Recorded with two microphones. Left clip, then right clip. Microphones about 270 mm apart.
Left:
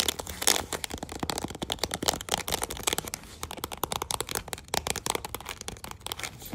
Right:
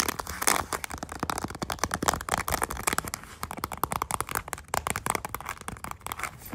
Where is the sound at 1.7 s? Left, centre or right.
Centre.